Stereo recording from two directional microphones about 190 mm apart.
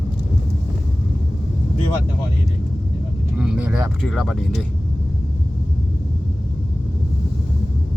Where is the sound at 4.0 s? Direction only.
5° left (ahead or behind).